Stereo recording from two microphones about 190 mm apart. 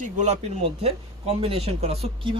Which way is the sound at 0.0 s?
35° right (ahead or behind).